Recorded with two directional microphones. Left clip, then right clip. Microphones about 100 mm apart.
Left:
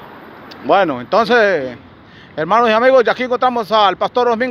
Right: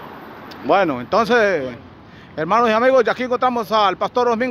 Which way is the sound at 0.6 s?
10° left (ahead or behind).